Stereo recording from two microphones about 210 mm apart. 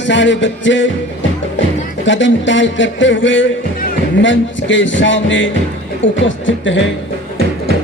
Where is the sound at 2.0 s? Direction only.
60° left (ahead or behind).